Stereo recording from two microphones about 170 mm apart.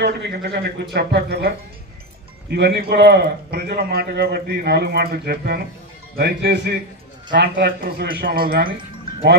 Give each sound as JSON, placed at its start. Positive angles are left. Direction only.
{"t": 0.0, "sound": "a man's voice", "side_deg": -75}
{"t": 2.5, "sound": "a man's voice", "side_deg": -75}